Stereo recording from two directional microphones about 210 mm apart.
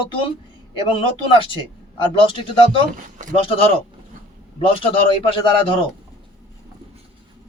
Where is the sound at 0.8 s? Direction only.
25° left (ahead or behind).